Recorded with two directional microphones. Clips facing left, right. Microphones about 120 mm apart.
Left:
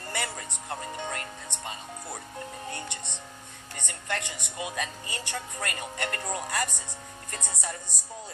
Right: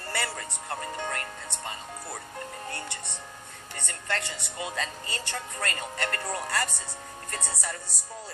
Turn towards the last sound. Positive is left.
turn(degrees=20)  # may be behind; listen again after turning